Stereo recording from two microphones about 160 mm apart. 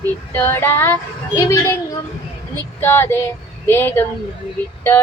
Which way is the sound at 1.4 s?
20° left (ahead or behind).